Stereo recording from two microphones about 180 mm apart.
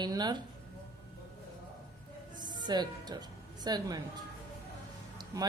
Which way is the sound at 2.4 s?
25° right (ahead or behind).